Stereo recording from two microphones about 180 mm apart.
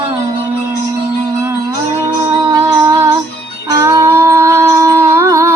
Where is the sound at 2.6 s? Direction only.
15° right (ahead or behind).